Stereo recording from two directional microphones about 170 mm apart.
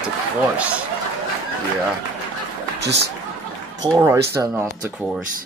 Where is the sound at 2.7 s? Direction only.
80° right.